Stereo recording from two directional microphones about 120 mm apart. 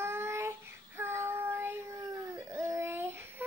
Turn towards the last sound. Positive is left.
turn(degrees=-20)  # may be behind; listen again after turning